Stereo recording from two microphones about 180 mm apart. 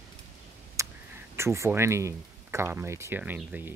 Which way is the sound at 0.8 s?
15° right (ahead or behind).